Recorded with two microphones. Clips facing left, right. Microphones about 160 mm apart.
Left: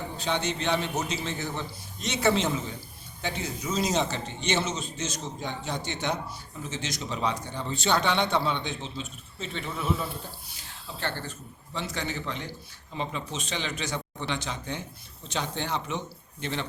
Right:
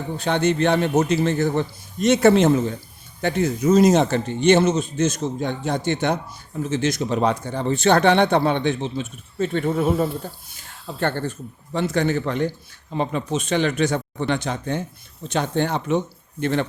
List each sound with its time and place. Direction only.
0.2 s speech: 55° right (ahead or behind)